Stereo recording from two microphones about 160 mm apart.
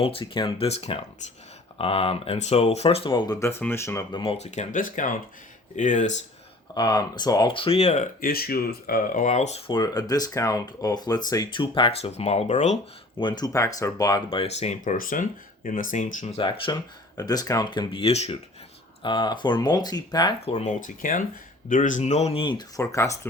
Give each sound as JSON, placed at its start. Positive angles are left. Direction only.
{"t": 0.0, "sound": "speech", "side_deg": 35}
{"t": 3.4, "sound": "speech", "side_deg": 15}
{"t": 4.1, "sound": "speech", "side_deg": 35}
{"t": 6.7, "sound": "speech", "side_deg": 25}
{"t": 13.1, "sound": "speech", "side_deg": 30}
{"t": 19.0, "sound": "speech", "side_deg": 30}
{"t": 20.4, "sound": "speech", "side_deg": 45}